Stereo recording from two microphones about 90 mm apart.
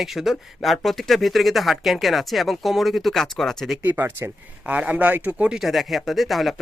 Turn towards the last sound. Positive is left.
turn(degrees=0)  # may be behind; listen again after turning